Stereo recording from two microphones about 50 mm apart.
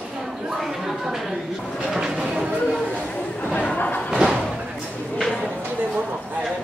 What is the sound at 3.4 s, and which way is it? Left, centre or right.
Chatter, left.